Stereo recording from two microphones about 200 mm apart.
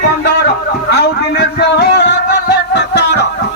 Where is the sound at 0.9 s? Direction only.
55° left (ahead or behind).